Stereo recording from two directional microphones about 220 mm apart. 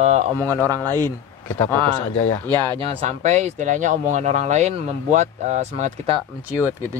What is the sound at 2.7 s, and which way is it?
Speech, 30° right (ahead or behind).